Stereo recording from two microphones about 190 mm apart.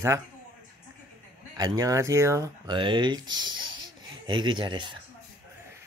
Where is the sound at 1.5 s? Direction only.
20° right (ahead or behind).